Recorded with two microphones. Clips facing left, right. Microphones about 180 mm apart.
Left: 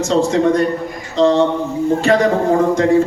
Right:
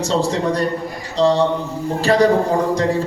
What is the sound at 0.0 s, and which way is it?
A man's voice, 35° right (ahead or behind).